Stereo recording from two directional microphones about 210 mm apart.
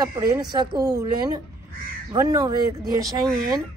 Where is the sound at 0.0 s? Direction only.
15° right (ahead or behind).